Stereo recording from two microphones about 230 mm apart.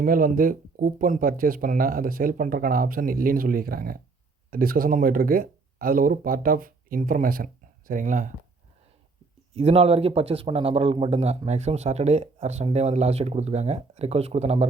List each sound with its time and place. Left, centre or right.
0.0 s speech: right
9.6 s speech: right